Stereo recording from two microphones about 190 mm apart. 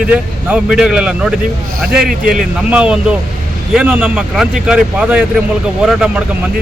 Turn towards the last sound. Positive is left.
turn(degrees=-5)  # may be behind; listen again after turning